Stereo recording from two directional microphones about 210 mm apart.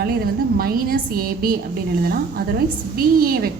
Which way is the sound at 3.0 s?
45° right (ahead or behind).